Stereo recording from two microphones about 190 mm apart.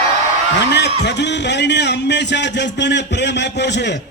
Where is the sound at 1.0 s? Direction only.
65° left (ahead or behind).